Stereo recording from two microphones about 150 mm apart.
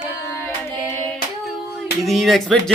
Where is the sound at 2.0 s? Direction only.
Centre (ahead or behind).